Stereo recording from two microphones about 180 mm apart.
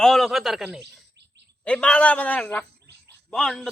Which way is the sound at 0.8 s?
70° right (ahead or behind).